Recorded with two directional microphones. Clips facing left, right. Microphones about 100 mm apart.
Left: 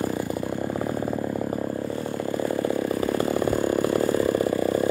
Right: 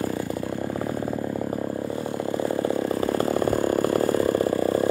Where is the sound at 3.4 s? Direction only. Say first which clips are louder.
Right 1 dB; 50° right (ahead or behind).